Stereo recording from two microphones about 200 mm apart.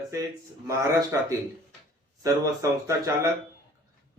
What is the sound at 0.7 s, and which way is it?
Speech, 15° right (ahead or behind).